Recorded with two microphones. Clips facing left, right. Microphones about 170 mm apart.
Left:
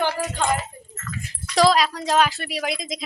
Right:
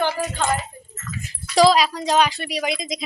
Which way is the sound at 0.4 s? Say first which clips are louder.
Even; 10° left (ahead or behind).